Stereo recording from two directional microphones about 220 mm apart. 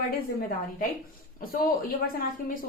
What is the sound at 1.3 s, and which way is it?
A woman's voice, 40° left (ahead or behind).